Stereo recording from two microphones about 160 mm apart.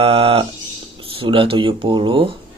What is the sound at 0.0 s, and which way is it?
Speech, 35° right (ahead or behind).